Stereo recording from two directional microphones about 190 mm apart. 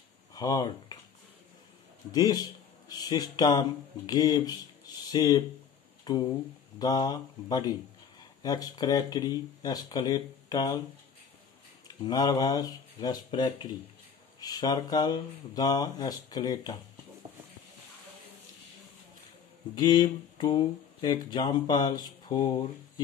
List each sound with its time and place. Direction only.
0.3 s speech: 20° left (ahead or behind)
2.1 s speech: 20° left (ahead or behind)
11.9 s speech: 20° left (ahead or behind)
19.7 s speech: 20° left (ahead or behind)